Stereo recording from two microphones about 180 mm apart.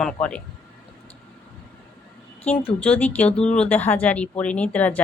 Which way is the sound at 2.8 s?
5° left (ahead or behind).